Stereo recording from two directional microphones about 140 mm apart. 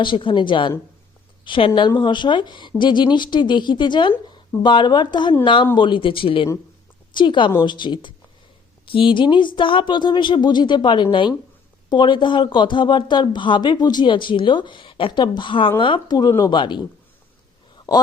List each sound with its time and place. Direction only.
0.0 s a woman's voice: 35° left (ahead or behind)
17.9 s speech: 30° left (ahead or behind)